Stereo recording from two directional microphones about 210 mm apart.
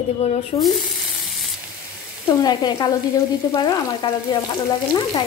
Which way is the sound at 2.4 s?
20° left (ahead or behind).